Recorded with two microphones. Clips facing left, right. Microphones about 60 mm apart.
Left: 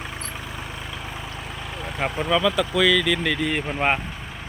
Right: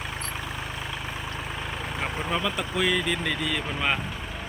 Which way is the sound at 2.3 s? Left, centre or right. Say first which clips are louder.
Left 8 dB; left.